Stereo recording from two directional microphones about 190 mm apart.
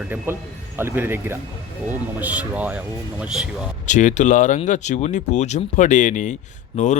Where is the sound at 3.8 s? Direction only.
40° left (ahead or behind).